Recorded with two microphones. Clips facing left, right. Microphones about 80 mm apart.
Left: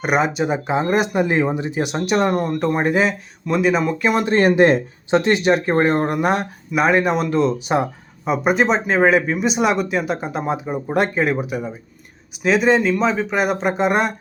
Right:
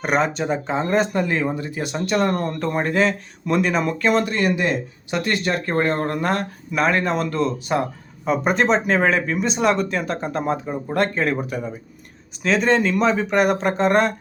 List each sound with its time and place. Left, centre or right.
0.0 s speech: centre
2.3 s speech: centre
2.6 s speech: centre
3.4 s speech: centre
4.3 s speech: left
5.1 s speech: left